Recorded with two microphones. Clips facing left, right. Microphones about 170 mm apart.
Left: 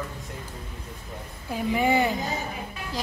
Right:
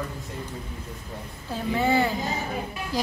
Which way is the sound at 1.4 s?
15° left (ahead or behind).